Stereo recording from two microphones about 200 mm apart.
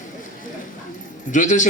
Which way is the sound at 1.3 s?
40° left (ahead or behind).